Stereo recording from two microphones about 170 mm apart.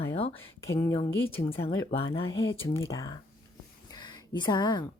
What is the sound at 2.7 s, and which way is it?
Speech, 20° left (ahead or behind).